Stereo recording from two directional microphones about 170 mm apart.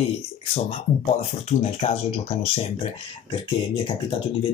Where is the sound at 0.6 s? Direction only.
40° left (ahead or behind).